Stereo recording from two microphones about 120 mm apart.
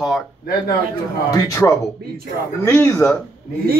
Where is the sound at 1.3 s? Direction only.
30° left (ahead or behind).